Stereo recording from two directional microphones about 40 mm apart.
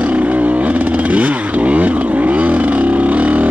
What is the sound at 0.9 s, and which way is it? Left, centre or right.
Motorcycle, right.